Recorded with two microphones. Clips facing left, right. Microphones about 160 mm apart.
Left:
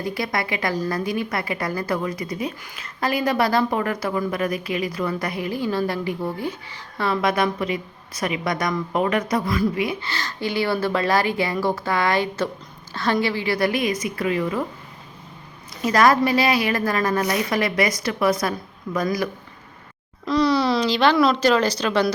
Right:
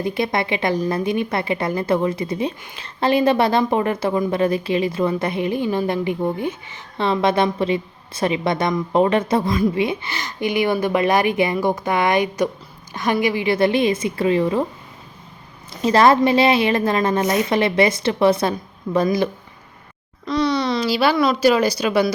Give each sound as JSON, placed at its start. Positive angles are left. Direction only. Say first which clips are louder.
{"t": 0.0, "sound": "a woman's voice", "louder": "right 4 dB", "side_deg": -25}
{"t": 15.8, "sound": "a woman's voice", "louder": "right 3 dB", "side_deg": -25}
{"t": 20.2, "sound": "speech", "louder": "left 1 dB", "side_deg": 0}